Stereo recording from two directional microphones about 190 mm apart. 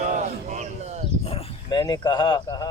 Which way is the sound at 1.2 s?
30° left (ahead or behind).